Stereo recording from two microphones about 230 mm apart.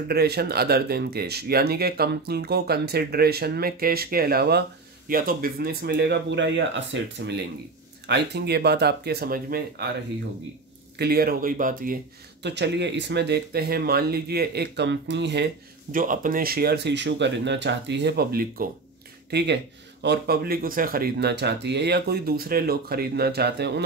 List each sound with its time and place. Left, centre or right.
0.1 s speech: right
11.0 s speech: right
12.4 s speech: right
15.9 s speech: right